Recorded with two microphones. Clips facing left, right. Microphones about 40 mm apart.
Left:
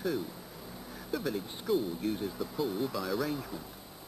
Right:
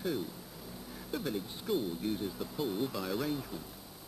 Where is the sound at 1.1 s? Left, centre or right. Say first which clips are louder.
Left 2 dB; centre.